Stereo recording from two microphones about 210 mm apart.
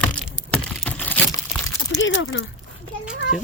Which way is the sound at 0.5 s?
10° left (ahead or behind).